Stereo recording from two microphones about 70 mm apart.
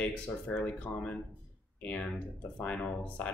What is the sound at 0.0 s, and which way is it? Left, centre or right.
Speech, centre.